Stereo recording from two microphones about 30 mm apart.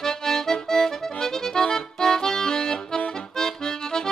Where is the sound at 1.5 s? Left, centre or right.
Centre.